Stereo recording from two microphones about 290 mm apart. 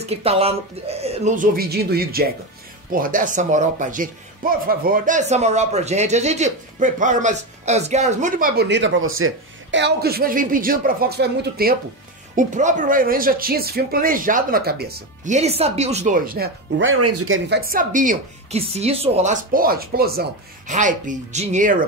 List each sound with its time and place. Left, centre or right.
0.0 s speech: right